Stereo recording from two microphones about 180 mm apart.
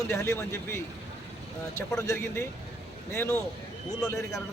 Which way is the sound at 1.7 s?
15° left (ahead or behind).